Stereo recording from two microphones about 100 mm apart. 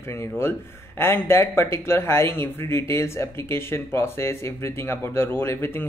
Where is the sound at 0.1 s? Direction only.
25° left (ahead or behind).